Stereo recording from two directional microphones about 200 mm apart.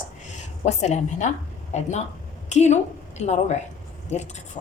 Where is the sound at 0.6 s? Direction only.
35° left (ahead or behind).